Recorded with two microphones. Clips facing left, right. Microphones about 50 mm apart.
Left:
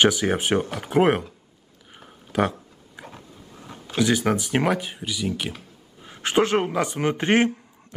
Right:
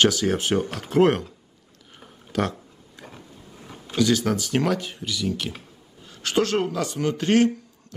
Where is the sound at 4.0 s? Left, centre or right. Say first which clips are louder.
Even; centre.